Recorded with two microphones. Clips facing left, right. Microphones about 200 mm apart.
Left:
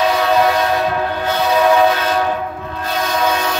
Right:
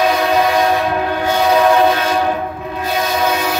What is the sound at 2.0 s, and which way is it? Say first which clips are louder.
Train: right 1 dB; 10° right (ahead or behind).